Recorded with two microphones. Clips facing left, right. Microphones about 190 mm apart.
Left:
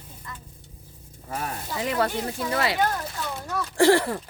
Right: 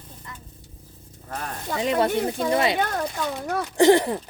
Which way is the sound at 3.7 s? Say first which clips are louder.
Right 2 dB; 20° right (ahead or behind).